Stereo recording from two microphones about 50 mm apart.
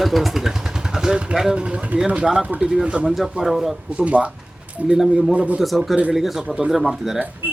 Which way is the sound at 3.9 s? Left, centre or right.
Right.